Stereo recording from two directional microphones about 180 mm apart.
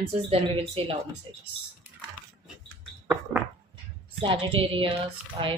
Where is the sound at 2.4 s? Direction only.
5° right (ahead or behind).